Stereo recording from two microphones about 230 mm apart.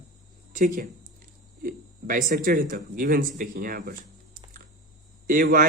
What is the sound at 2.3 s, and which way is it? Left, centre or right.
A man's voice, right.